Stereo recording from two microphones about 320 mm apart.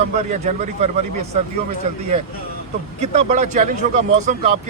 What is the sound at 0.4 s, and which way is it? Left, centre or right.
Speech, right.